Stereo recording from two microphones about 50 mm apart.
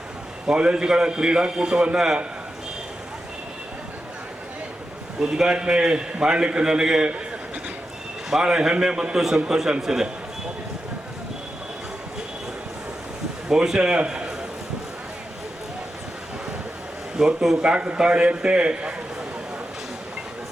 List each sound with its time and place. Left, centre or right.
0.4 s a man's voice: centre
5.2 s a man's voice: centre
8.3 s a man's voice: centre
13.5 s a man's voice: centre
17.2 s a man's voice: centre
17.6 s a man's voice: right